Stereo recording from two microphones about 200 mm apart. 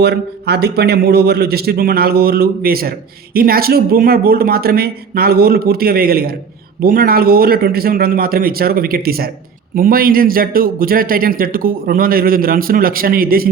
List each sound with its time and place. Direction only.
0.0 s a man's voice: 55° right (ahead or behind)